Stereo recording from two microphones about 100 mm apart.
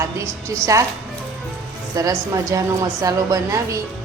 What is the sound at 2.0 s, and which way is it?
Speech, 35° right (ahead or behind).